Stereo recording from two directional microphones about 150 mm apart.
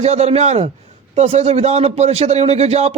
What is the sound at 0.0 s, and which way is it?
A man's voice, 45° right (ahead or behind).